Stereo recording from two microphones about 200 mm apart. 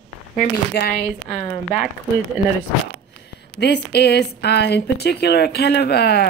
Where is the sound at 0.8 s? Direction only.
55° left (ahead or behind).